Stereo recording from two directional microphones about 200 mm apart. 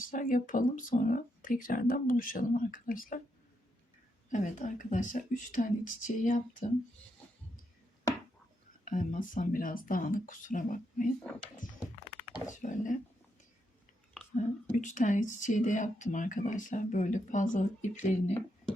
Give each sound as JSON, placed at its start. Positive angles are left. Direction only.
{"t": 0.0, "sound": "speech", "side_deg": 45}
{"t": 4.3, "sound": "a woman's voice", "side_deg": 40}
{"t": 8.8, "sound": "a woman's voice", "side_deg": 40}
{"t": 12.5, "sound": "a woman's voice", "side_deg": 40}
{"t": 14.3, "sound": "a woman's voice", "side_deg": 40}